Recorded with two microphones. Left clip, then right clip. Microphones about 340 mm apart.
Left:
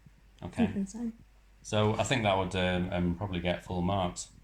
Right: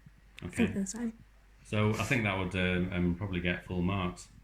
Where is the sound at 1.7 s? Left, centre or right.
Centre.